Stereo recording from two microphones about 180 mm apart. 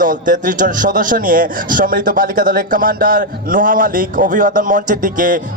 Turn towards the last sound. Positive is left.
turn(degrees=-50)  # may be behind; listen again after turning